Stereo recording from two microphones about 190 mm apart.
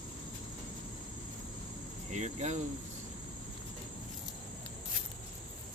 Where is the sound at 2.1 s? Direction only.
35° right (ahead or behind).